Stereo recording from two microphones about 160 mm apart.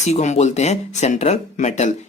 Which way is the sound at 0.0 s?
45° left (ahead or behind).